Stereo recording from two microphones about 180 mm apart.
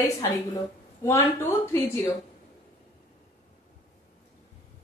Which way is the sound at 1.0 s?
15° left (ahead or behind).